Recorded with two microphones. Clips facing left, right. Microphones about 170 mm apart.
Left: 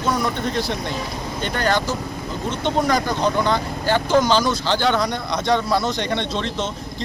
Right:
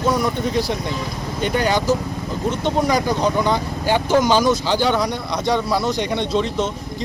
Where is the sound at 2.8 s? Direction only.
10° right (ahead or behind).